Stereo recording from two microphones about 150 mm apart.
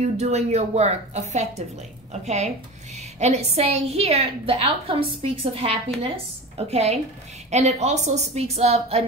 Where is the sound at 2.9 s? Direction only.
50° right (ahead or behind).